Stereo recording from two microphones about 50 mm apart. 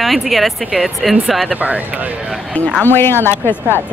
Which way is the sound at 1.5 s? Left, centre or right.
Right.